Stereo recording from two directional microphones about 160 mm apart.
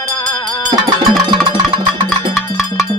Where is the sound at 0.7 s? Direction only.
25° right (ahead or behind).